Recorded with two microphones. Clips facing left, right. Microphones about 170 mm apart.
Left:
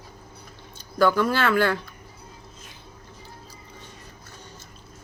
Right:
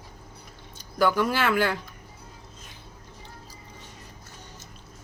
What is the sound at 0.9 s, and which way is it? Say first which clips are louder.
Speech: left 2 dB; 15° right (ahead or behind).